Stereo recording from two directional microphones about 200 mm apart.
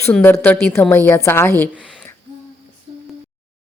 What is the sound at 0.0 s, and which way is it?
A woman's voice, 10° left (ahead or behind).